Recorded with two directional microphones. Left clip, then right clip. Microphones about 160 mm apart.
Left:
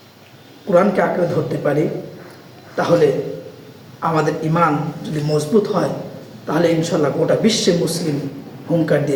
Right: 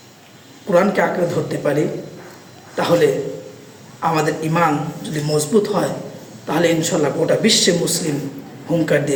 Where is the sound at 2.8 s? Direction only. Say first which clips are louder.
Left 1 dB; 5° right (ahead or behind).